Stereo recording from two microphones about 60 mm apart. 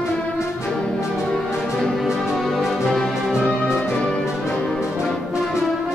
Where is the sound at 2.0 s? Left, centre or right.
Centre.